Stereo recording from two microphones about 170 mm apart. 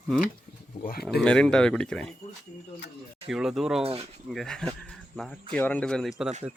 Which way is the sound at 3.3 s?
Centre (ahead or behind).